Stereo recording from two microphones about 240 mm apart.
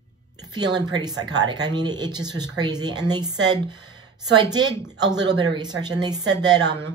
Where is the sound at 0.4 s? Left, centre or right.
Centre.